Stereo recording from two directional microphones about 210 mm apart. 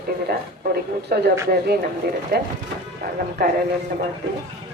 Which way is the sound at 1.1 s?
45° right (ahead or behind).